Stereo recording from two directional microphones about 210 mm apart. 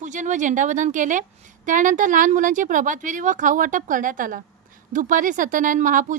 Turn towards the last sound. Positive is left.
turn(degrees=-40)  # may be behind; listen again after turning